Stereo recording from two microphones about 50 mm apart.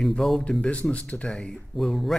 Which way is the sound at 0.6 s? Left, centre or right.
Left.